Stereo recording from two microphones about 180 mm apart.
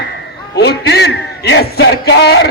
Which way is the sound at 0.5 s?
65° left (ahead or behind).